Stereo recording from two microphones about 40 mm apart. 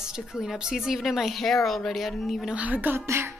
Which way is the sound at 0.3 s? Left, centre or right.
Centre.